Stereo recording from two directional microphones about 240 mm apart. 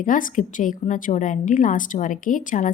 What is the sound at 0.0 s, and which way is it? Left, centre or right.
A woman's voice, left.